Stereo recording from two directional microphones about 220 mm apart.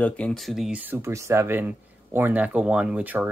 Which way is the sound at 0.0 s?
5° left (ahead or behind).